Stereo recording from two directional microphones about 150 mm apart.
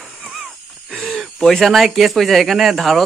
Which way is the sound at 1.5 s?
Centre (ahead or behind).